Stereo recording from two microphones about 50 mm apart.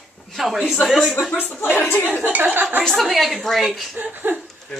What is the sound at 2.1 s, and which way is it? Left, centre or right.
Speech, right.